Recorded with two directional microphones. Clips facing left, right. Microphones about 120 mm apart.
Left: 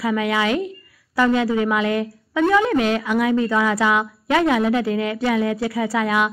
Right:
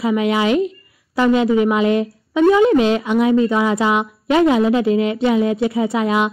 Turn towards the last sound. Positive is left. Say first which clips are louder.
# right 3 dB
turn(degrees=-25)  # may be behind; listen again after turning